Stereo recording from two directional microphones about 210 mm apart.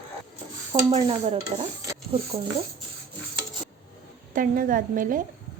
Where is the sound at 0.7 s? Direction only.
20° right (ahead or behind).